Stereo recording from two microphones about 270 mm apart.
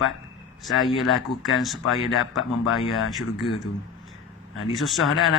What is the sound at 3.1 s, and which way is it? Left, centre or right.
Speech, centre.